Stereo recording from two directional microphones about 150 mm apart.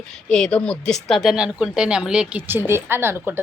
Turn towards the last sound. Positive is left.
turn(degrees=-15)  # may be behind; listen again after turning